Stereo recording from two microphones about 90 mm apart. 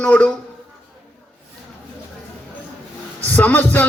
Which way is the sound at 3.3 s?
20° left (ahead or behind).